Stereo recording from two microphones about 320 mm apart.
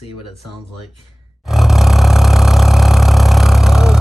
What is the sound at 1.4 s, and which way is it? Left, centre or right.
Roar, centre.